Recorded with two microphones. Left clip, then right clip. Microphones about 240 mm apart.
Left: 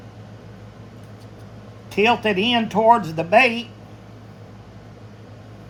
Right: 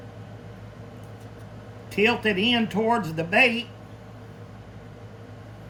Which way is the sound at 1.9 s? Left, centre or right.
Centre.